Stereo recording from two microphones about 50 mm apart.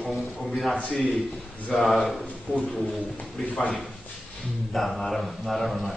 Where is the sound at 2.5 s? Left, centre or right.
Right.